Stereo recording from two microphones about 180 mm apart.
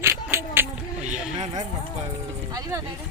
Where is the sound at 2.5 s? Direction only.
20° right (ahead or behind).